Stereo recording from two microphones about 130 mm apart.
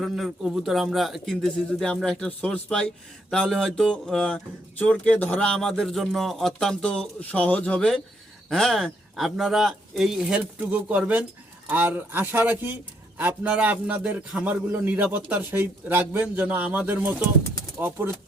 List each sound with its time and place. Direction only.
0.0 s a man's voice: 5° right (ahead or behind)